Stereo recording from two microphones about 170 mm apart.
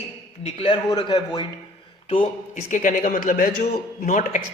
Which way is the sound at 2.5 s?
50° left (ahead or behind).